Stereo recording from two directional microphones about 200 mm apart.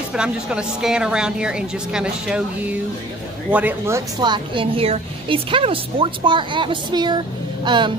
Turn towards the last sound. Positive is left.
turn(degrees=-25)  # may be behind; listen again after turning